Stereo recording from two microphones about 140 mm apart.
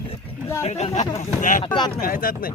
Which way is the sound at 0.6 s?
55° left (ahead or behind).